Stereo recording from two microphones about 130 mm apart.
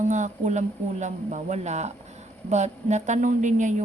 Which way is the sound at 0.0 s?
70° right (ahead or behind).